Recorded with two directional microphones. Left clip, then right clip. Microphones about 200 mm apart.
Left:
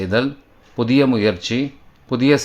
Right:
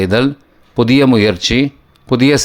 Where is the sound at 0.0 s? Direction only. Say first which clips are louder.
Right 6 dB; 35° right (ahead or behind).